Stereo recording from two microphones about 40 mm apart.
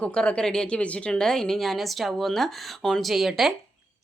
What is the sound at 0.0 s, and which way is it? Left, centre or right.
Speech, left.